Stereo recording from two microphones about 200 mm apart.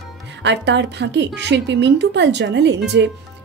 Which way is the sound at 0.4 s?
60° right (ahead or behind).